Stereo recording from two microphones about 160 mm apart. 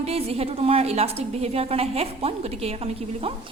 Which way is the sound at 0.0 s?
40° right (ahead or behind).